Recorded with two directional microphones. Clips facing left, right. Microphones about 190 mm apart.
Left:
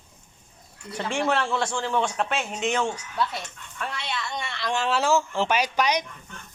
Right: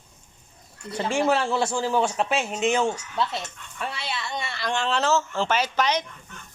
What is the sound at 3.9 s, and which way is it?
Speech, 5° right (ahead or behind).